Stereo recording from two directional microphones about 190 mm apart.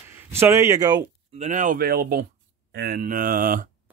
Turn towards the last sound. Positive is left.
turn(degrees=-45)  # may be behind; listen again after turning